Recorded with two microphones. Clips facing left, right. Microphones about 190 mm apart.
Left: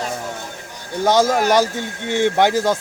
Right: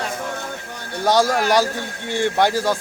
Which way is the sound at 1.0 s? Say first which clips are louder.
Left 2 dB; 20° left (ahead or behind).